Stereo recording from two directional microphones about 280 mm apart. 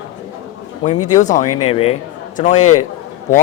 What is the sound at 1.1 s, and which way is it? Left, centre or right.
A man's voice, left.